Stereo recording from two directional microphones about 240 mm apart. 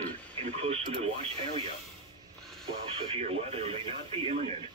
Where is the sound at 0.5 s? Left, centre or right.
Right.